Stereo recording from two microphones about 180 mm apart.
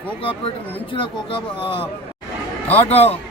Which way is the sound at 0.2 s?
30° left (ahead or behind).